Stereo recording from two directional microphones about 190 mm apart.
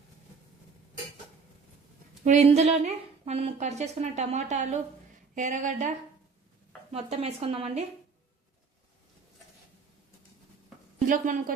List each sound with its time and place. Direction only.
2.2 s a woman's voice: 35° right (ahead or behind)
6.9 s a woman's voice: 35° right (ahead or behind)
11.1 s a woman's voice: 45° right (ahead or behind)